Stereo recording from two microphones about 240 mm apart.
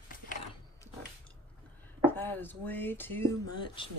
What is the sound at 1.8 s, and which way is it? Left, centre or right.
Speech, centre.